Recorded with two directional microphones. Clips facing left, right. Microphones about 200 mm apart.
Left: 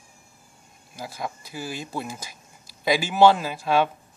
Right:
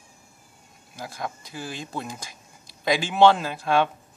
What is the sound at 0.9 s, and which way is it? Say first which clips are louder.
Speech: left 1 dB; 5° left (ahead or behind).